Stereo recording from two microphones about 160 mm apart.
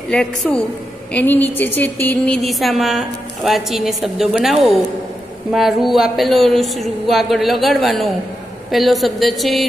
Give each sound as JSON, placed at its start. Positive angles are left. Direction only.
{"t": 0.1, "sound": "speech", "side_deg": 5}